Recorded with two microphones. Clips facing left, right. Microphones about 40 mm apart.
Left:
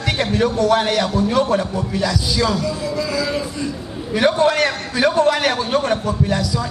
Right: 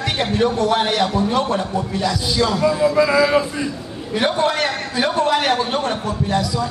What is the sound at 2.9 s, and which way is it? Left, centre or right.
Speech, right.